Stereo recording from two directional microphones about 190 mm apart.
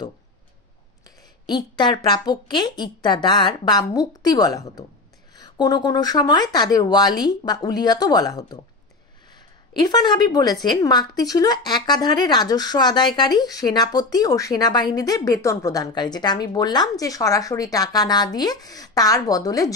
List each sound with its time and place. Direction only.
1.4 s a woman's voice: 20° left (ahead or behind)
9.8 s a woman's voice: 20° left (ahead or behind)